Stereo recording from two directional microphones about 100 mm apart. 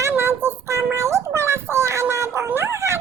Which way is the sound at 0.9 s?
30° right (ahead or behind).